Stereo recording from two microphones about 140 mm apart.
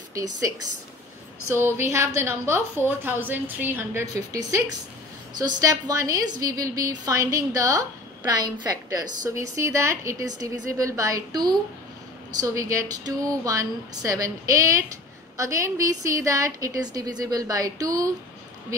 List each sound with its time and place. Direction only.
0.1 s speech: 25° right (ahead or behind)
1.9 s a woman's voice: 20° right (ahead or behind)
8.9 s a woman's voice: 25° right (ahead or behind)